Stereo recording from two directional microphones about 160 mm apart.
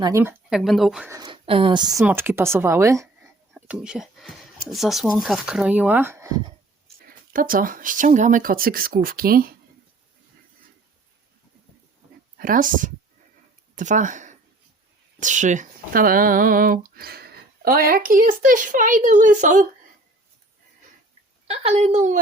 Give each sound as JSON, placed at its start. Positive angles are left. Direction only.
{"t": 0.0, "sound": "speech", "side_deg": -15}
{"t": 0.5, "sound": "speech", "side_deg": 0}
{"t": 1.1, "sound": "speech", "side_deg": -30}
{"t": 2.0, "sound": "speech", "side_deg": -15}
{"t": 3.5, "sound": "a sound", "side_deg": -5}
{"t": 4.7, "sound": "speech", "side_deg": 0}
{"t": 7.1, "sound": "speech", "side_deg": -60}
{"t": 12.4, "sound": "speech", "side_deg": -60}
{"t": 21.4, "sound": "a woman's voice", "side_deg": -40}